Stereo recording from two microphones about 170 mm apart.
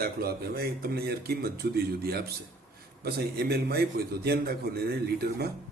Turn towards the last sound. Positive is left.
turn(degrees=-65)  # may be behind; listen again after turning